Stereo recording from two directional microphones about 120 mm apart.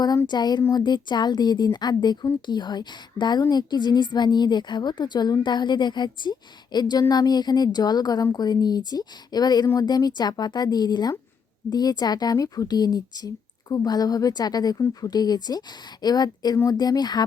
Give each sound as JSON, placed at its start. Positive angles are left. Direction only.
{"t": 0.3, "sound": "speech", "side_deg": 35}